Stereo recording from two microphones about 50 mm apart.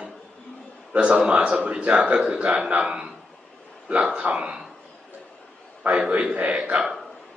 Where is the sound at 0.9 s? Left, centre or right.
Centre.